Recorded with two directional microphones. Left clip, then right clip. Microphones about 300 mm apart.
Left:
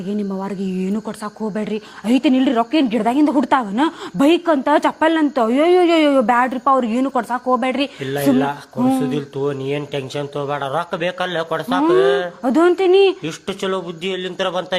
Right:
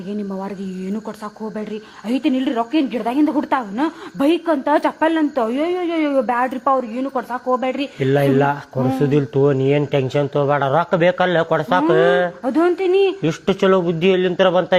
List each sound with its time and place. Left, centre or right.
1.5 s a woman's voice: left
8.0 s speech: right
12.5 s a woman's voice: left
13.2 s speech: right